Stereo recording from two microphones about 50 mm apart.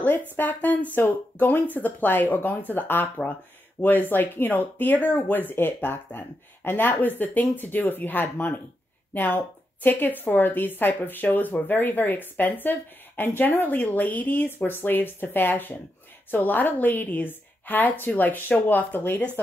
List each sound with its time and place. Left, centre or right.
0.4 s a woman's voice: left